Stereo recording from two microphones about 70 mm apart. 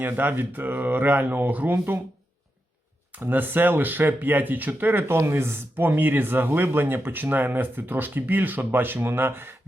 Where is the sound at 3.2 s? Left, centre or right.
Right.